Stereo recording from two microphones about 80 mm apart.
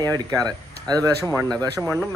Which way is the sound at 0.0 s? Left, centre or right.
Right.